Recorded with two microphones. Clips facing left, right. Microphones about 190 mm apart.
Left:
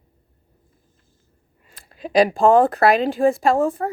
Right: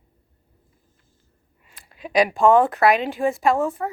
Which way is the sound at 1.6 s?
35° left (ahead or behind).